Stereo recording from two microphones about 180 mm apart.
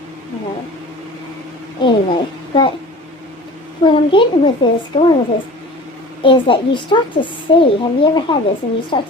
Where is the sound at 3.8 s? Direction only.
25° left (ahead or behind).